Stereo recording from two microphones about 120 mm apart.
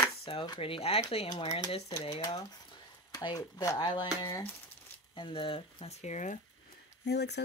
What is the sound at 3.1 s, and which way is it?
Speech, 30° left (ahead or behind).